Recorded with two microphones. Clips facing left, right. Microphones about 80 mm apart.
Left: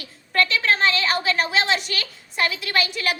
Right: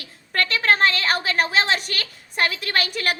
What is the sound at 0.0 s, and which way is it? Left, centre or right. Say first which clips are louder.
A woman's voice: left 3 dB; right.